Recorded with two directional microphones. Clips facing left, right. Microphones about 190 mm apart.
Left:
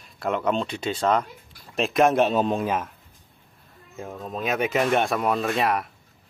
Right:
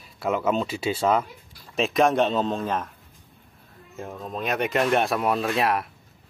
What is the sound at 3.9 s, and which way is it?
Speech, centre (ahead or behind).